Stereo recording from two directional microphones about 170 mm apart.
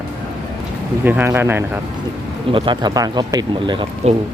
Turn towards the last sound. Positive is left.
turn(degrees=-30)  # may be behind; listen again after turning